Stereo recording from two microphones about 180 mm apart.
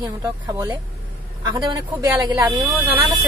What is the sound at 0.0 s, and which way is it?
Speech, 20° right (ahead or behind).